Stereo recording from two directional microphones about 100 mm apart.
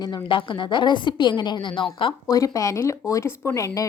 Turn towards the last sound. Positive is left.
turn(degrees=35)  # may be behind; listen again after turning